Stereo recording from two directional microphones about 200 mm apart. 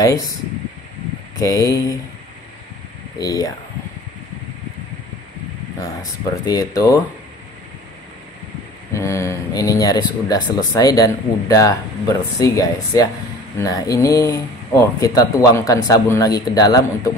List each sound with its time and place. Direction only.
1.4 s speech: 15° left (ahead or behind)
3.2 s speech: 20° left (ahead or behind)
6.4 s speech: 20° left (ahead or behind)
8.9 s speech: 15° left (ahead or behind)